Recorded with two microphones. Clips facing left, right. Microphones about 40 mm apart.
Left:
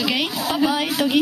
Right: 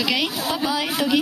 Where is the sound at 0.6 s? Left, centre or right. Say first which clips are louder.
Left 5 dB; left.